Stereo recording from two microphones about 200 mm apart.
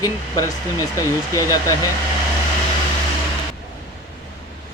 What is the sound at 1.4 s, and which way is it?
Speech, 15° left (ahead or behind).